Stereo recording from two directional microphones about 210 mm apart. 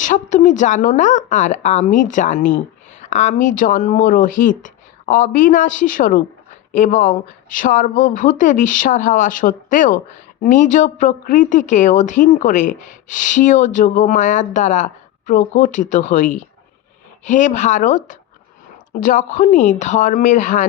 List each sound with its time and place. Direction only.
0.0 s speech: 35° left (ahead or behind)